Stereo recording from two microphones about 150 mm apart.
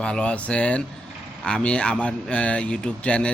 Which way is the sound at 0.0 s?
5° left (ahead or behind).